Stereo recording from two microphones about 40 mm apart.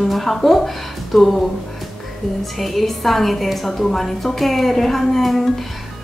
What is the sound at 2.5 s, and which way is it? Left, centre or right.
A woman's voice, centre.